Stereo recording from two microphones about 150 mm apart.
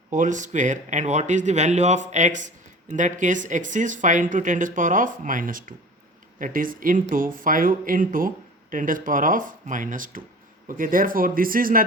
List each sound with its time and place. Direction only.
0.1 s speech: 55° right (ahead or behind)